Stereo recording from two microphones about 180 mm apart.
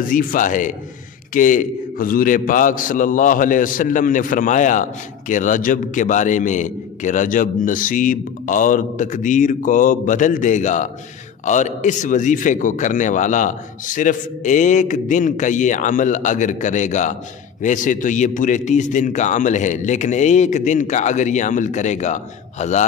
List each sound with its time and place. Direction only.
0.1 s a man's voice: 50° left (ahead or behind)